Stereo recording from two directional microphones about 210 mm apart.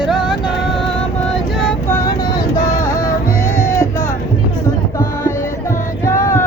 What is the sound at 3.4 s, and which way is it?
Music, 15° left (ahead or behind).